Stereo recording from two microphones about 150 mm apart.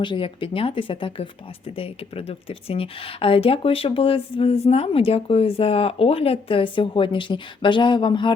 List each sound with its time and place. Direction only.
0.0 s a woman's voice: 35° left (ahead or behind)